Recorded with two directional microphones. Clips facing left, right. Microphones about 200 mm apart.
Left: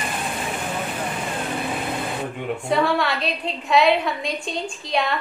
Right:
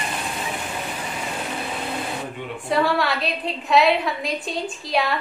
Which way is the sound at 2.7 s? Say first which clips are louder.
Even; centre (ahead or behind).